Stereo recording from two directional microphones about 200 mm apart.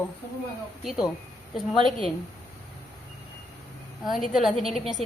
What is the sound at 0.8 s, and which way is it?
Speech, 5° right (ahead or behind).